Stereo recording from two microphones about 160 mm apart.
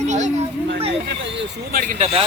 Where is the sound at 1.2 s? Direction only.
75° right (ahead or behind).